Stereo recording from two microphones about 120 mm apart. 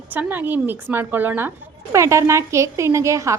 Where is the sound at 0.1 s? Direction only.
15° right (ahead or behind).